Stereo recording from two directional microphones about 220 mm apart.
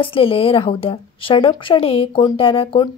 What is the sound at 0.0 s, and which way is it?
Speech, 25° left (ahead or behind).